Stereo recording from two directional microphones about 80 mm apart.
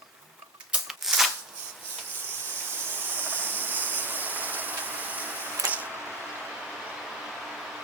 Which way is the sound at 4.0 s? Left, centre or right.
Right.